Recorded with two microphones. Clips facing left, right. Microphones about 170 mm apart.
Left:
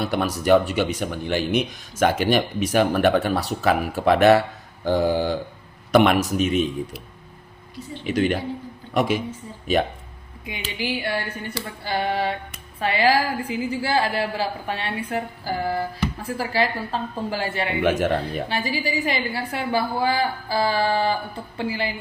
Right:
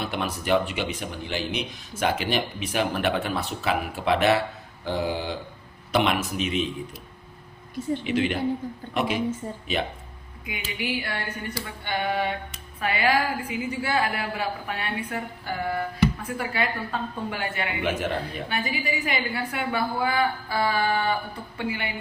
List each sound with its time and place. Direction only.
0.0 s speech: 40° left (ahead or behind)
8.0 s speech: 45° left (ahead or behind)
10.8 s a woman's voice: 30° left (ahead or behind)
17.8 s speech: 50° left (ahead or behind)
18.4 s a woman's voice: 30° left (ahead or behind)